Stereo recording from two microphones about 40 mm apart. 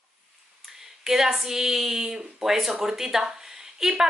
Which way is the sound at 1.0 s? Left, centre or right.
Centre.